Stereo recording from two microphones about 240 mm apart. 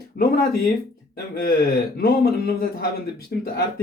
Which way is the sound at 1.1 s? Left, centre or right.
Left.